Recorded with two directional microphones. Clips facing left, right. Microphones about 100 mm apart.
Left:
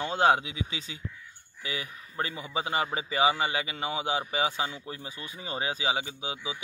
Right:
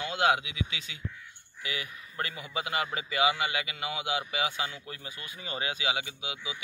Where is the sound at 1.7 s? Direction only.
25° left (ahead or behind).